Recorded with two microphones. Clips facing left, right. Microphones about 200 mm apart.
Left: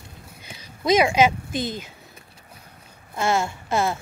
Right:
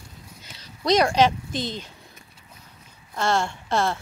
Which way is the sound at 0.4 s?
10° left (ahead or behind).